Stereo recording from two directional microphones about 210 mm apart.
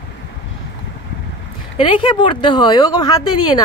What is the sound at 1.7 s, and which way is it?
Speech, 20° left (ahead or behind).